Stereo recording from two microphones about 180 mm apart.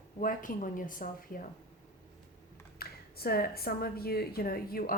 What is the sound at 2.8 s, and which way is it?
Speech, 60° left (ahead or behind).